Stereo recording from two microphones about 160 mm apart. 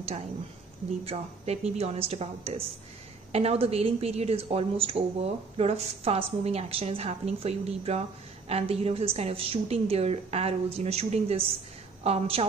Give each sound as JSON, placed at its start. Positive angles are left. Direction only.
{"t": 1.0, "sound": "a woman's voice", "side_deg": -40}